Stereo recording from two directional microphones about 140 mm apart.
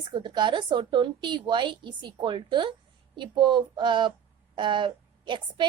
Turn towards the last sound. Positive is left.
turn(degrees=-35)  # may be behind; listen again after turning